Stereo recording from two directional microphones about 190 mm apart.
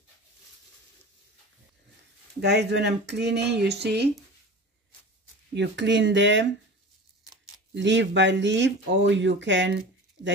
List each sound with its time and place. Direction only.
2.4 s speech: 65° right (ahead or behind)
5.5 s speech: 70° right (ahead or behind)
7.7 s speech: 70° right (ahead or behind)